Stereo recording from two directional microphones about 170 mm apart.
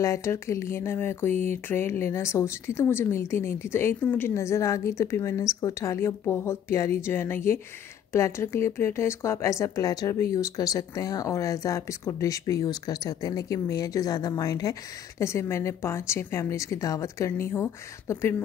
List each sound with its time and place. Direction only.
0.0 s speech: 15° left (ahead or behind)